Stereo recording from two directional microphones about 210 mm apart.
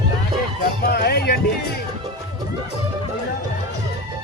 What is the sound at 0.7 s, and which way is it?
Music, 50° left (ahead or behind).